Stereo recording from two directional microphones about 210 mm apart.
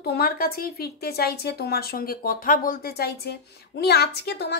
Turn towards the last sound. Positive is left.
turn(degrees=50)  # may be behind; listen again after turning